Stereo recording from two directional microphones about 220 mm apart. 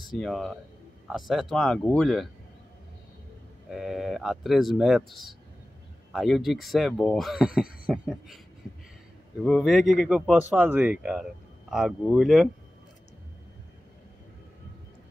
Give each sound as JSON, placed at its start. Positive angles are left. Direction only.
{"t": 0.2, "sound": "speech", "side_deg": 0}
{"t": 3.7, "sound": "speech", "side_deg": 0}
{"t": 7.8, "sound": "a sound", "side_deg": -5}
{"t": 9.4, "sound": "speech", "side_deg": 0}